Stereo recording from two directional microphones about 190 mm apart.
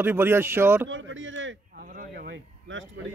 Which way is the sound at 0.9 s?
90° right.